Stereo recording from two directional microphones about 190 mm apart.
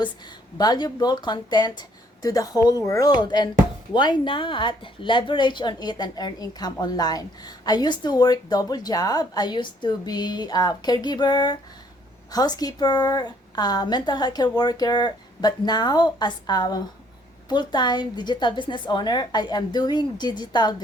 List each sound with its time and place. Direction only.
0.6 s a woman's voice: 20° left (ahead or behind)